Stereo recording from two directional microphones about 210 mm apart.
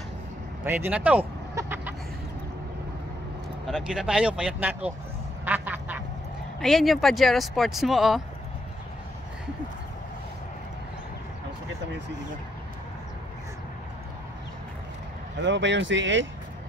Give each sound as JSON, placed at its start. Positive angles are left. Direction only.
{"t": 0.7, "sound": "a sound", "side_deg": -10}
{"t": 3.6, "sound": "speech", "side_deg": 0}
{"t": 5.4, "sound": "quack", "side_deg": -10}
{"t": 6.6, "sound": "speech", "side_deg": 0}
{"t": 15.4, "sound": "speech", "side_deg": -60}